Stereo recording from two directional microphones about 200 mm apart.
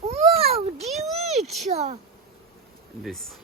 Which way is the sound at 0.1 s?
30° right (ahead or behind).